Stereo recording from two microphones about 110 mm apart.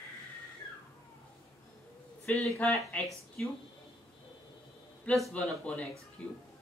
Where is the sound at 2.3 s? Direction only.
15° left (ahead or behind).